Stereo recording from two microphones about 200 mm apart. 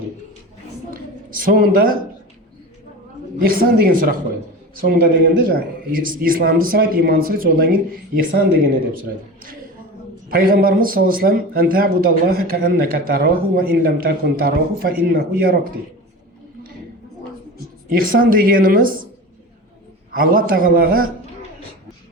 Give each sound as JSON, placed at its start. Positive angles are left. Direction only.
{"t": 1.5, "sound": "a man's voice", "side_deg": -45}
{"t": 3.6, "sound": "a man's voice", "side_deg": -45}
{"t": 10.2, "sound": "a man's voice", "side_deg": -45}
{"t": 17.8, "sound": "a man's voice", "side_deg": -45}
{"t": 20.1, "sound": "a man's voice", "side_deg": -45}